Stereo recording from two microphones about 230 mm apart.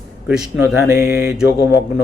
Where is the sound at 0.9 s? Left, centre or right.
Left.